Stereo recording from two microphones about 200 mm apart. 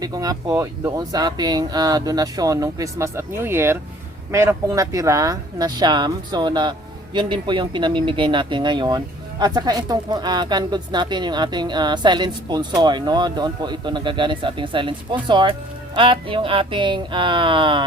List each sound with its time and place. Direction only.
0.0 s speech: 20° right (ahead or behind)